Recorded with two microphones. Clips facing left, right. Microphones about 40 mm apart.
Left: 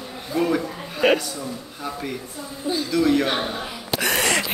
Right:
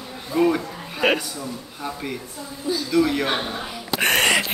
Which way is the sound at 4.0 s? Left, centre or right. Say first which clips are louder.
Right 4 dB; right.